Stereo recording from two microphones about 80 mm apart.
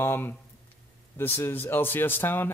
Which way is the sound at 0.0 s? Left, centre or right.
Left.